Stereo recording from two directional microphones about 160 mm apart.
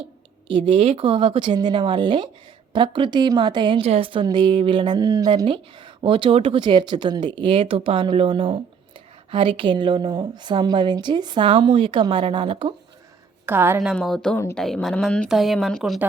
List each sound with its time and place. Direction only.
0.4 s a woman's voice: 30° right (ahead or behind)
13.4 s a woman's voice: 15° right (ahead or behind)
13.8 s speech: centre (ahead or behind)